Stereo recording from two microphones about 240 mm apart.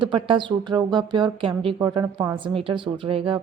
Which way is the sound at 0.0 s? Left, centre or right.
Right.